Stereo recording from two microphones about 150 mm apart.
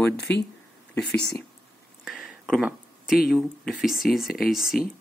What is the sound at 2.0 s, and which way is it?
Speech, 5° right (ahead or behind).